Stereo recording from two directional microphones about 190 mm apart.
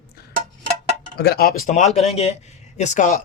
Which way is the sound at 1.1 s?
55° left (ahead or behind).